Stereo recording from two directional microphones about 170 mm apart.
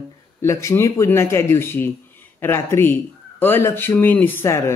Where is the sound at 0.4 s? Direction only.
15° left (ahead or behind).